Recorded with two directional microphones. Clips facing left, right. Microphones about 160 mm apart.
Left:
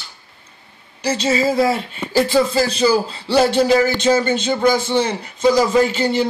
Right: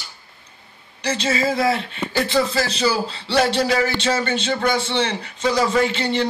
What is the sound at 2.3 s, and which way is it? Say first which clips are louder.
Speech: left 3 dB; 10° left (ahead or behind).